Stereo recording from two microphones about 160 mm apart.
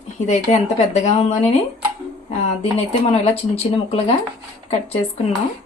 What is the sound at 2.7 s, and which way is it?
Speech, 40° left (ahead or behind).